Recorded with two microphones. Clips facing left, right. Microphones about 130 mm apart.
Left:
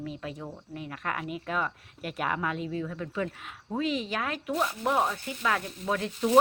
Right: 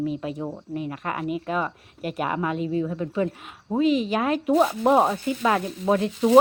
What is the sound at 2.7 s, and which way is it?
Speech, 20° right (ahead or behind).